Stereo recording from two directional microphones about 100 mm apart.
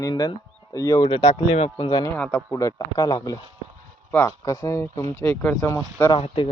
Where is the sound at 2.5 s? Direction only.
35° left (ahead or behind).